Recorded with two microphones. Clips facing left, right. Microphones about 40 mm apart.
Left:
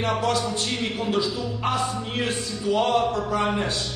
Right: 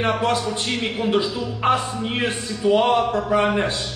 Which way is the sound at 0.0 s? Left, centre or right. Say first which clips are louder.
Right 3 dB; right.